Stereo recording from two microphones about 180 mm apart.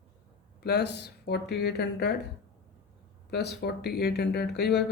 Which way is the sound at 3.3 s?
65° left (ahead or behind).